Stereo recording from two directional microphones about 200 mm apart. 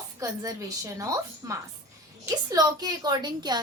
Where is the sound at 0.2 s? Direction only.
15° right (ahead or behind).